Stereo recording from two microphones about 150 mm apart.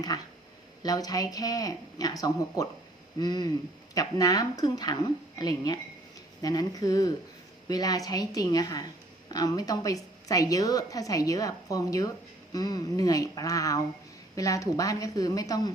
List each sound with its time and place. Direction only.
0.8 s a woman's voice: 25° left (ahead or behind)